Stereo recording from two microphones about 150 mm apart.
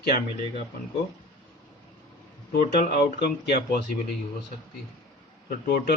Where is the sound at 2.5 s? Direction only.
90° left.